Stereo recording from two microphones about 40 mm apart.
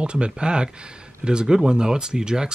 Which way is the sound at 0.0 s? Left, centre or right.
Right.